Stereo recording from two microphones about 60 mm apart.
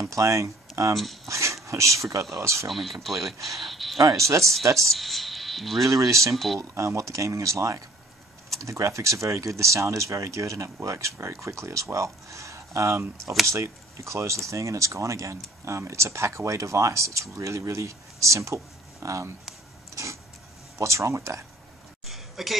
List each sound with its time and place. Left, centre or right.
0.0 s speech: right
0.9 s speech: centre
1.3 s speech: right
2.7 s speech: centre
4.0 s speech: right
4.9 s speech: centre
5.9 s speech: right
6.3 s speech: centre
6.6 s speech: right
20.7 s speech: right
22.0 s a sound: centre